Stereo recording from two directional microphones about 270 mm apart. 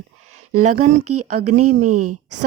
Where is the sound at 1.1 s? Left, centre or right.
Right.